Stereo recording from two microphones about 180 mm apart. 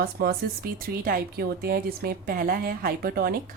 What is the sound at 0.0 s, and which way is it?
Speech, 55° right (ahead or behind).